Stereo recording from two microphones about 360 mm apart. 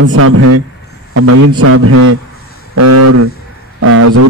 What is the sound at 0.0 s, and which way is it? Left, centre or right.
A man's voice, right.